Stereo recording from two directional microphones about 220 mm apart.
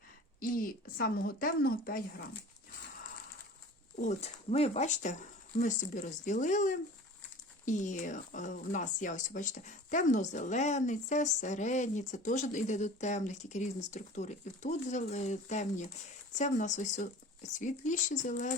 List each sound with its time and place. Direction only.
0.3 s speech: 40° left (ahead or behind)
3.9 s speech: 30° left (ahead or behind)